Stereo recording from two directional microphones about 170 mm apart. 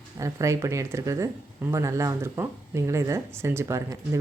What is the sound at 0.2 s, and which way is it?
Speech, 20° right (ahead or behind).